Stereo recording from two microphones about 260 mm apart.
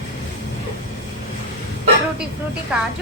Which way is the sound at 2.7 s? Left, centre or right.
Centre.